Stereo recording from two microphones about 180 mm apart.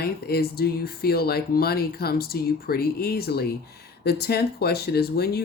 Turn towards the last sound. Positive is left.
turn(degrees=60)  # may be behind; listen again after turning